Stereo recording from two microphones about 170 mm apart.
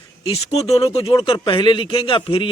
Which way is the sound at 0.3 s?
35° left (ahead or behind).